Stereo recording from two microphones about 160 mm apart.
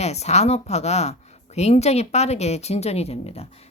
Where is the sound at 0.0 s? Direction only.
45° left (ahead or behind).